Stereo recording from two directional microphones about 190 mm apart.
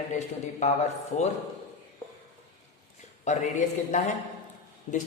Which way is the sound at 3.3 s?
40° left (ahead or behind).